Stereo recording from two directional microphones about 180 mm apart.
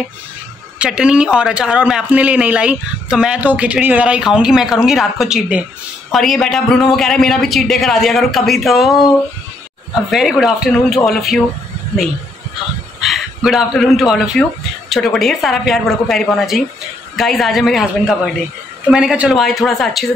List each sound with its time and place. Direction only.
0.7 s speech: 5° right (ahead or behind)
10.1 s speech: centre (ahead or behind)
13.0 s speech: centre (ahead or behind)